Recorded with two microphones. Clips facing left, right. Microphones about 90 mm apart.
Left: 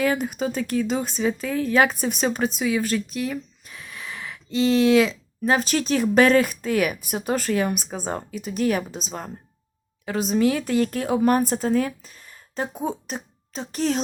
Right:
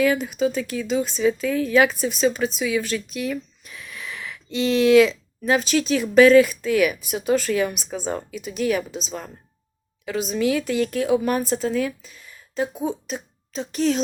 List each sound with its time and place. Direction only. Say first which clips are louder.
0.0 s speech: right 3 dB; 45° left (ahead or behind)